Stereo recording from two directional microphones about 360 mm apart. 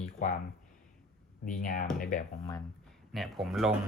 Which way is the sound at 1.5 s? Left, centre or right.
Left.